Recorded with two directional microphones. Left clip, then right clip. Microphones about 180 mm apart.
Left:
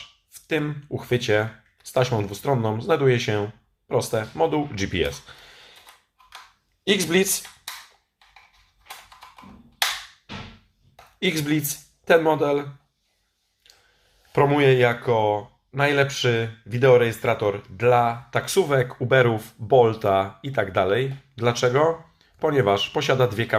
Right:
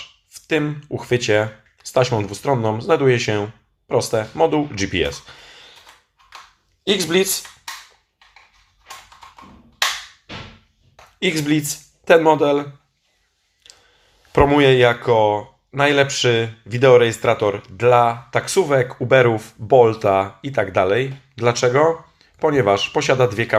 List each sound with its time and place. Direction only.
0.3 s speech: 5° right (ahead or behind)
6.8 s speech: 5° left (ahead or behind)
11.2 s speech: centre (ahead or behind)
13.6 s a sound: 10° right (ahead or behind)
14.3 s speech: 10° right (ahead or behind)